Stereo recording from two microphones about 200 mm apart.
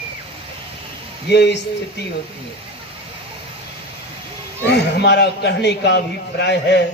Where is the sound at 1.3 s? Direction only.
60° left (ahead or behind).